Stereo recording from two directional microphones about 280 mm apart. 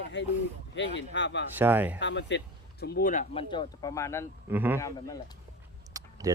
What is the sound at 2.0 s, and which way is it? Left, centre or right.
Speech, left.